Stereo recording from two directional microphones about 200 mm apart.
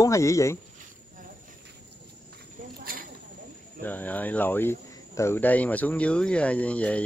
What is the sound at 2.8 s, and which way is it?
Snake, 45° right (ahead or behind).